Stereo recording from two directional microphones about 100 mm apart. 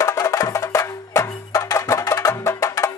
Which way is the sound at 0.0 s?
30° left (ahead or behind).